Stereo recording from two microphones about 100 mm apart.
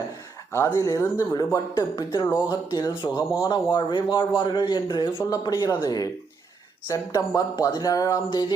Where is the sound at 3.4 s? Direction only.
50° left (ahead or behind).